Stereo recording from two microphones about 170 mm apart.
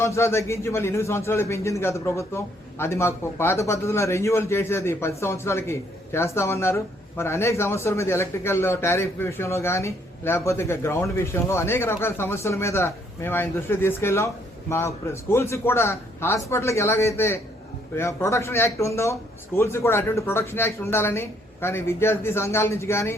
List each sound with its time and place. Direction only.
0.0 s a man's voice: 15° left (ahead or behind)